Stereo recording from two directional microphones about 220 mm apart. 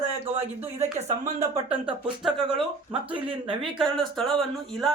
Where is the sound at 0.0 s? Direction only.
25° right (ahead or behind).